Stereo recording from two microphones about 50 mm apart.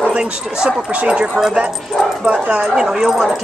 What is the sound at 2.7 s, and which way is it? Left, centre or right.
Speech, centre.